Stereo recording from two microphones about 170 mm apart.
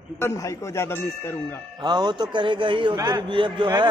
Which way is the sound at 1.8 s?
25° right (ahead or behind).